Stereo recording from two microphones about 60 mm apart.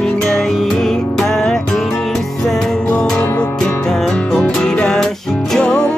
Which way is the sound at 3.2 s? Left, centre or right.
Left.